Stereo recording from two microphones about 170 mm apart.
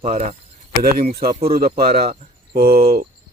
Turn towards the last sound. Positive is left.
turn(degrees=-60)  # may be behind; listen again after turning